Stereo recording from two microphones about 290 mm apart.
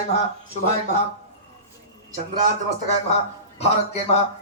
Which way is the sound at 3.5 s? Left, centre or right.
Left.